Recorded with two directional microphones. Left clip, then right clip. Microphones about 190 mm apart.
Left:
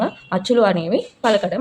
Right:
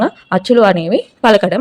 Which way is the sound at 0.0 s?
30° right (ahead or behind).